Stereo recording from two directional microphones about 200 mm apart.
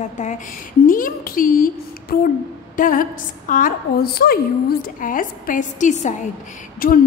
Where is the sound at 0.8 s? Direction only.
45° left (ahead or behind).